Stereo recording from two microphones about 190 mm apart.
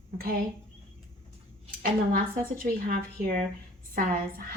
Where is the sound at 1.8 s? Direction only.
45° right (ahead or behind).